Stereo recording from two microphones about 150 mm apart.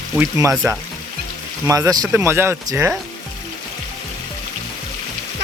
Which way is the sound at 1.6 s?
20° right (ahead or behind).